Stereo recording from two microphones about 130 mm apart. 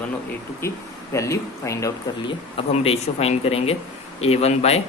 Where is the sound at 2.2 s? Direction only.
40° left (ahead or behind).